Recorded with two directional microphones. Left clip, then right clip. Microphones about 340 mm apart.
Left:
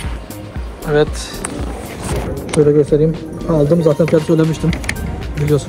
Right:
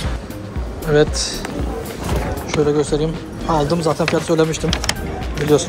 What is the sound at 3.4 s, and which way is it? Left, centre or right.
Speech, left.